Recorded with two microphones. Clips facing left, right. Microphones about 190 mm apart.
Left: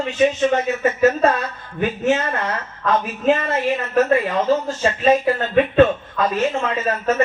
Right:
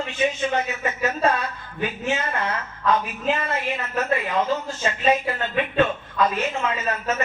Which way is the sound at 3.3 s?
45° left (ahead or behind).